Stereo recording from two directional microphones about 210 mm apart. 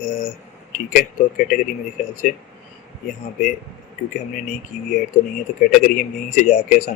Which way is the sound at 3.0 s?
35° left (ahead or behind).